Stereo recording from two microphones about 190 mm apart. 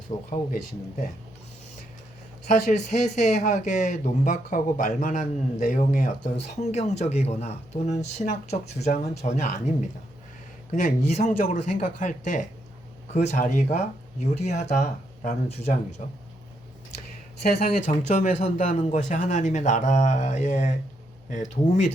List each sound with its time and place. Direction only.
0.3 s speech: 40° left (ahead or behind)
2.5 s speech: 40° left (ahead or behind)
10.7 s speech: 40° left (ahead or behind)
17.3 s speech: 55° left (ahead or behind); by 21.8 s 40° left (ahead or behind)